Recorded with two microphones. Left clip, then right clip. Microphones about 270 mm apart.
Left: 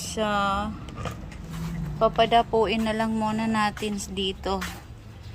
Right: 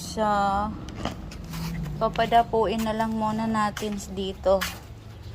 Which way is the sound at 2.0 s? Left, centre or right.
Centre.